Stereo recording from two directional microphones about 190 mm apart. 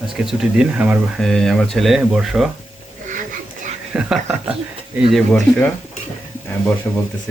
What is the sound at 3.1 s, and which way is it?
Dog, 45° right (ahead or behind).